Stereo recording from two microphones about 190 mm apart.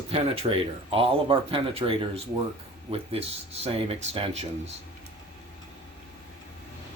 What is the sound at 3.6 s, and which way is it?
Speech, 30° right (ahead or behind).